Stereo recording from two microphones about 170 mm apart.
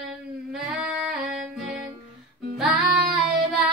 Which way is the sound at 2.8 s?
60° right (ahead or behind).